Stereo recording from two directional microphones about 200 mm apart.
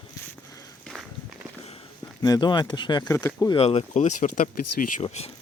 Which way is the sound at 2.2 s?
20° left (ahead or behind).